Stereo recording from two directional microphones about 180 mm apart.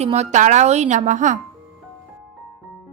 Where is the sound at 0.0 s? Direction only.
35° right (ahead or behind).